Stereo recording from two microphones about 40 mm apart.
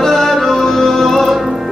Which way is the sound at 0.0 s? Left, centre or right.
Centre.